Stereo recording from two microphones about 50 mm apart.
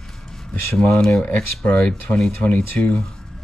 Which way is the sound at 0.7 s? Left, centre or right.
Centre.